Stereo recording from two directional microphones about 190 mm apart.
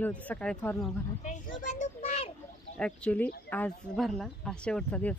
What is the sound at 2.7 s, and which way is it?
A woman's voice, 5° left (ahead or behind).